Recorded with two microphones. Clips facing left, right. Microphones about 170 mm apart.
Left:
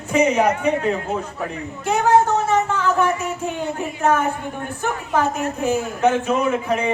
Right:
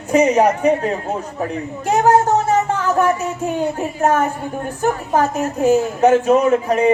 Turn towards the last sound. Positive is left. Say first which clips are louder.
# right 6 dB
turn(degrees=-40)  # may be behind; listen again after turning